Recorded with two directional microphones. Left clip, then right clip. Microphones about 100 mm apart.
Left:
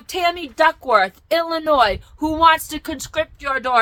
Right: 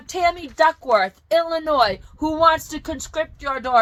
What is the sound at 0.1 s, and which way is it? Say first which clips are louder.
A woman's voice: even; 40° left (ahead or behind).